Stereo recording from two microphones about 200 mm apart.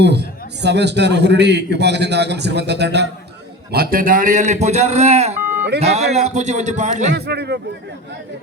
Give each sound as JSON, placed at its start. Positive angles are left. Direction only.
{"t": 0.0, "sound": "a man's voice", "side_deg": -60}
{"t": 7.1, "sound": "a man's voice", "side_deg": -55}